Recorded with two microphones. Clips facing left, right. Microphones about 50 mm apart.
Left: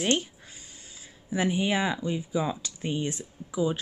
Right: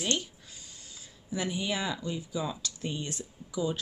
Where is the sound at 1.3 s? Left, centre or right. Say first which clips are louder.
Left 6 dB; left.